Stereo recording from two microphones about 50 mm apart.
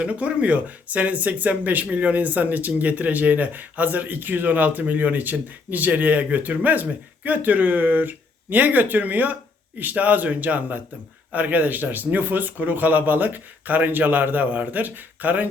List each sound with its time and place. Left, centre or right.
0.0 s speech: right